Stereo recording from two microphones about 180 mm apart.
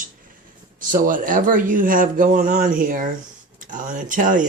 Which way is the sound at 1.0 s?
50° right (ahead or behind).